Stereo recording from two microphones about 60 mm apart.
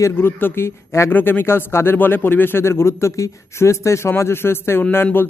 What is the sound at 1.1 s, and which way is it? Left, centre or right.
Speech, left.